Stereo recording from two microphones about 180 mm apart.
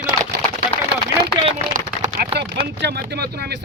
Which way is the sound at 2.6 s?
65° right (ahead or behind).